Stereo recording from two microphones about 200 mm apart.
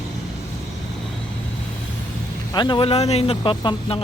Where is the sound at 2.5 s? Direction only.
25° left (ahead or behind).